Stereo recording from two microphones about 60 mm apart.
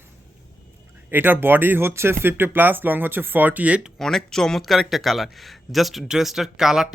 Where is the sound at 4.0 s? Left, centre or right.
Centre.